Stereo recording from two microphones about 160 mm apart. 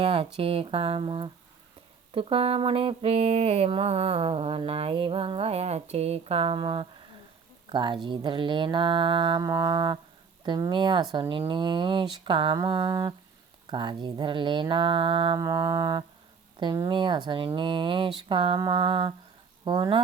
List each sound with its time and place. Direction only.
0.0 s mantra: 35° right (ahead or behind)
7.7 s speech: 30° right (ahead or behind)
16.9 s mantra: 30° right (ahead or behind)
19.6 s speech: 30° right (ahead or behind)